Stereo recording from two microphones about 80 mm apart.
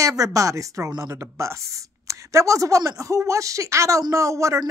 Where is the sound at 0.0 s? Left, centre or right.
Right.